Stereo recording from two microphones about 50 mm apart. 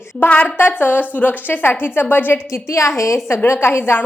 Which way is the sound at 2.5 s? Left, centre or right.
Left.